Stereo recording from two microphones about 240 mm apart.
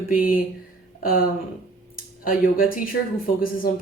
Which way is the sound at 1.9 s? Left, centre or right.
Left.